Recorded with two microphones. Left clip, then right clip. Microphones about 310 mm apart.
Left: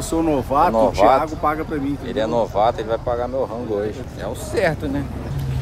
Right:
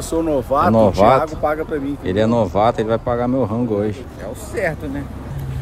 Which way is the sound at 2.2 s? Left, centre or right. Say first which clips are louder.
Right 2 dB; right.